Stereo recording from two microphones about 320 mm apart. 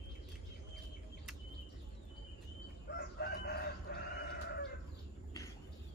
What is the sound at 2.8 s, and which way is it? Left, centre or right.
Chicken, left.